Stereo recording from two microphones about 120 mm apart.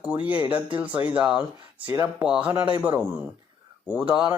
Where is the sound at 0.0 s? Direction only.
10° right (ahead or behind).